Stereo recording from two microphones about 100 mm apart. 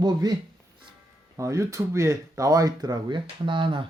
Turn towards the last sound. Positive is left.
turn(degrees=-55)  # may be behind; listen again after turning